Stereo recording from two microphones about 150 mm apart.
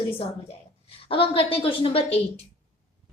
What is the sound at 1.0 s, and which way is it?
A woman's voice, 35° left (ahead or behind).